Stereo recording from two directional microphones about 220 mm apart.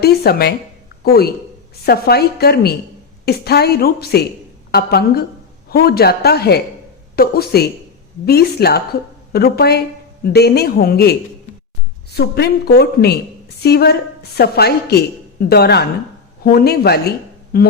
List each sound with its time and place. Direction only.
0.0 s a woman's voice: 45° left (ahead or behind)